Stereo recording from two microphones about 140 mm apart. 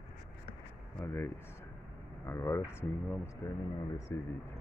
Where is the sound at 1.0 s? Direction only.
15° left (ahead or behind).